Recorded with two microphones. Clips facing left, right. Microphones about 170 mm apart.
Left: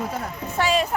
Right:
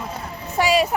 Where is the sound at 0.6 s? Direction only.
10° right (ahead or behind).